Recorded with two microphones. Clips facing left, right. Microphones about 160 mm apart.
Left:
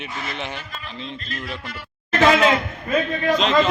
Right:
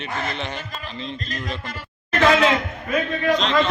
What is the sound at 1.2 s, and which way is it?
Music, 40° right (ahead or behind).